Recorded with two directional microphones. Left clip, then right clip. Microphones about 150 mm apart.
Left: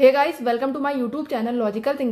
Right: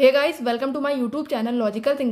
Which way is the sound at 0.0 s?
20° right (ahead or behind).